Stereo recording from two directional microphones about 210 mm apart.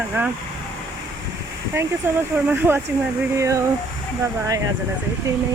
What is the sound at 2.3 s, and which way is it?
Speech, 10° right (ahead or behind).